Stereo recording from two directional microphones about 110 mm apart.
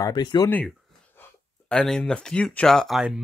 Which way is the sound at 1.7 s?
10° left (ahead or behind).